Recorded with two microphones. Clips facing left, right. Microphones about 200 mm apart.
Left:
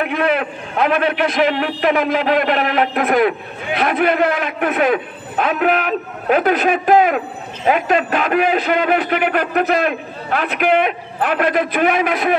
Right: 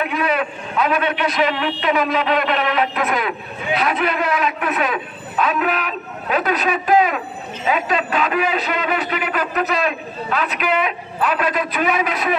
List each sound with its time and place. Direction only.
0.1 s a man's voice: 55° left (ahead or behind)